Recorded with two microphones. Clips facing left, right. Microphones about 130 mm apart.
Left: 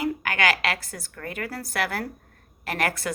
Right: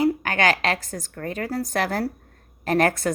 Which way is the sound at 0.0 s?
35° right (ahead or behind).